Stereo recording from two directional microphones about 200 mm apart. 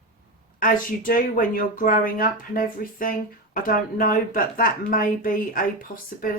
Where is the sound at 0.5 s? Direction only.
45° left (ahead or behind).